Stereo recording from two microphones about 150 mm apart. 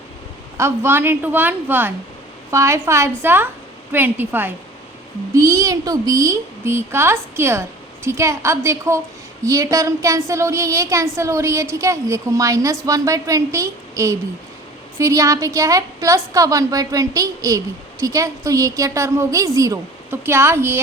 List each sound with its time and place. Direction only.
0.5 s a woman's voice: 15° right (ahead or behind)